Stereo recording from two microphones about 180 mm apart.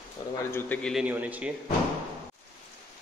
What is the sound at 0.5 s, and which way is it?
Speech, 10° left (ahead or behind).